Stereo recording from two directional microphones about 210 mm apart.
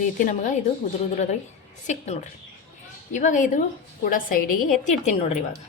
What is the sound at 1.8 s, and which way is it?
A woman's voice, 35° left (ahead or behind).